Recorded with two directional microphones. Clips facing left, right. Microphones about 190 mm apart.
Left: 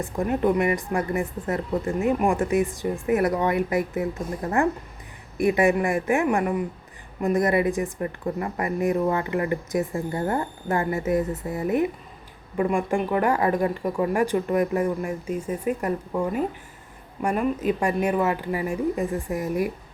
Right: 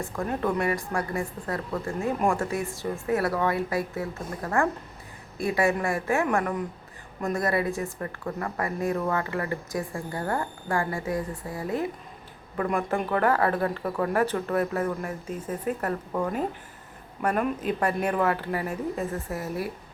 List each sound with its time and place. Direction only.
0.0 s speech: 15° left (ahead or behind)